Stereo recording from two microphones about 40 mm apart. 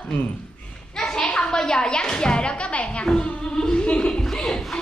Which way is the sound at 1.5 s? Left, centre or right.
Centre.